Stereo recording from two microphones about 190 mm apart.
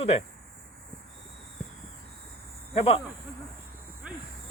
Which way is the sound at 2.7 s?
35° left (ahead or behind).